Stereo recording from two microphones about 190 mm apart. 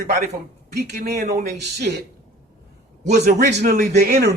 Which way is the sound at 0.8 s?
55° right (ahead or behind).